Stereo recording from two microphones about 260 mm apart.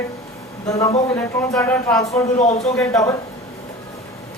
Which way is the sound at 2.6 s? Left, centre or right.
Centre.